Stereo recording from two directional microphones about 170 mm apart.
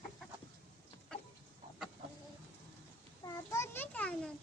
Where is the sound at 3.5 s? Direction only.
15° left (ahead or behind).